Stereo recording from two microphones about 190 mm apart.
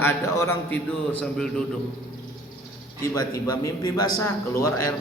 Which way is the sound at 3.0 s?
20° left (ahead or behind).